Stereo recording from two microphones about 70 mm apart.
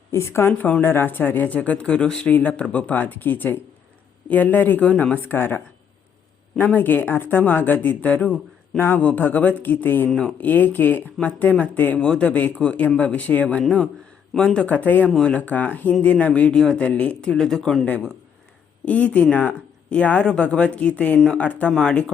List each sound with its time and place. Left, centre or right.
0.1 s speech: left
0.6 s speech: left
6.7 s speech: left
10.1 s speech: centre
10.4 s speech: left
11.9 s speech: centre
15.1 s speech: centre
15.4 s speech: left; by 17.8 s centre
17.8 s speech: left
21.7 s speech: centre